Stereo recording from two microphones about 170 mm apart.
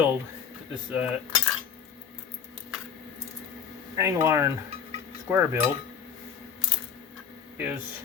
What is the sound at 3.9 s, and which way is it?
Speech, 15° right (ahead or behind).